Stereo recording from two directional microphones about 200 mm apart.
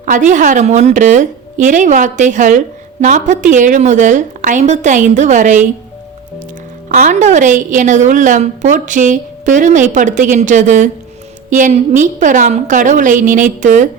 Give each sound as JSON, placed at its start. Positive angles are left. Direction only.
{"t": 0.0, "sound": "a woman's voice", "side_deg": -40}
{"t": 6.8, "sound": "a woman's voice", "side_deg": -40}